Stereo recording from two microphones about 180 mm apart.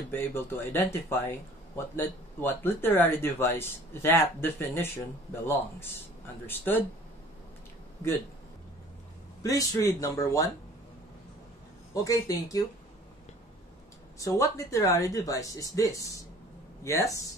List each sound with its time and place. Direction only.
0.1 s speech: 10° left (ahead or behind)
9.4 s speech: 20° left (ahead or behind)
11.9 s speech: 20° left (ahead or behind)
14.1 s speech: 20° left (ahead or behind)